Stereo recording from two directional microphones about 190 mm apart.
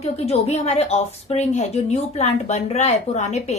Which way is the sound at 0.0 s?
35° left (ahead or behind).